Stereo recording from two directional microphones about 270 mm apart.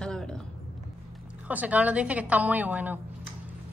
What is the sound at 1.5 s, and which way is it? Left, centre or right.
A woman's voice, centre.